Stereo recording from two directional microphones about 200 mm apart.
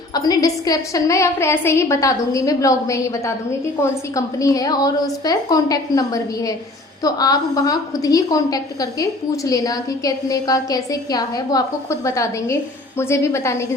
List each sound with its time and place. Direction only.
0.1 s a woman's voice: 20° left (ahead or behind)